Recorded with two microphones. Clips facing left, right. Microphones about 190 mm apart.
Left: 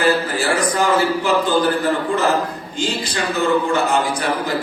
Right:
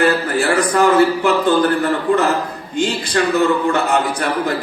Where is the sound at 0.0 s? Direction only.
60° right (ahead or behind).